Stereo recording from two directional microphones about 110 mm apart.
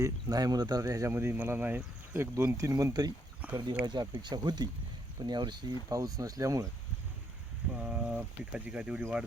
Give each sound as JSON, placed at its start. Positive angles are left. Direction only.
{"t": 0.0, "sound": "speech", "side_deg": -35}
{"t": 3.4, "sound": "speech", "side_deg": -15}
{"t": 3.8, "sound": "speech", "side_deg": -40}
{"t": 7.8, "sound": "speech", "side_deg": -10}